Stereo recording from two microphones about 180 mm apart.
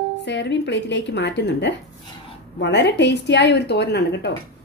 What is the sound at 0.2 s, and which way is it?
Speech, 75° left (ahead or behind).